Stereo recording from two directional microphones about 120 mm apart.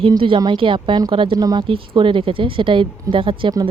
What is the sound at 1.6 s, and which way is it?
Speech, 45° right (ahead or behind).